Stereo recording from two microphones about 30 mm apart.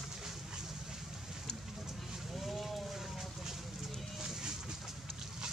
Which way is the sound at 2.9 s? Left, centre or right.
Centre.